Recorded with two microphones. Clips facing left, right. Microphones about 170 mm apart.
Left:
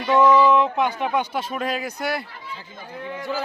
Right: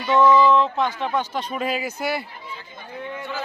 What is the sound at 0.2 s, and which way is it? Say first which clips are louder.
Speech: even; 15° left (ahead or behind).